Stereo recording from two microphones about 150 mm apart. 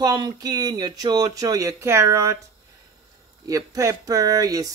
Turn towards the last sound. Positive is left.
turn(degrees=-25)  # may be behind; listen again after turning